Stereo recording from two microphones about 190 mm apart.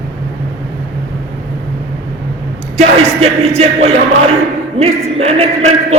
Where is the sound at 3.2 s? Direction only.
35° right (ahead or behind).